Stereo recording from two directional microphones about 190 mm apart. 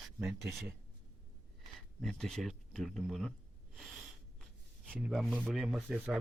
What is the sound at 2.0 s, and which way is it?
Speech, 5° left (ahead or behind).